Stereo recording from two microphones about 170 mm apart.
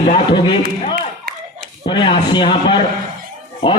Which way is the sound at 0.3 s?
25° left (ahead or behind).